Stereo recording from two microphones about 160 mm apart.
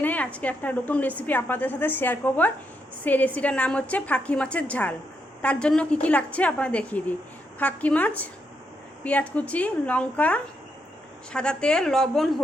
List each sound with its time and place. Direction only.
0.0 s a woman's voice: 10° left (ahead or behind)